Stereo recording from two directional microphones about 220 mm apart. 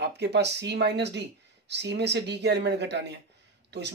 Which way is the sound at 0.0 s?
50° right (ahead or behind).